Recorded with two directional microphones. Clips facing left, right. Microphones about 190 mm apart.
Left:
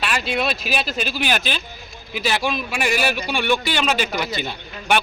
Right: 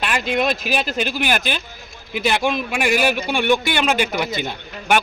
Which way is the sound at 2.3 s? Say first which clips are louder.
Right 2 dB; 20° right (ahead or behind).